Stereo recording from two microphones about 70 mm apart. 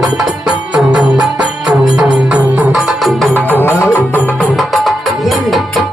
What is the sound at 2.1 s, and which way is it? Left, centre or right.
Music, centre.